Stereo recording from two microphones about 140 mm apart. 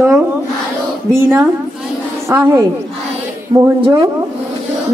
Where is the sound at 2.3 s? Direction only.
15° right (ahead or behind).